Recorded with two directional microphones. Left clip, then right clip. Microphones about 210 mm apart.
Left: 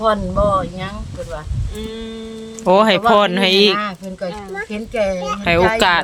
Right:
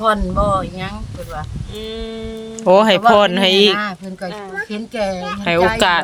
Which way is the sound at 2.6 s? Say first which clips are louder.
Right 2 dB; centre (ahead or behind).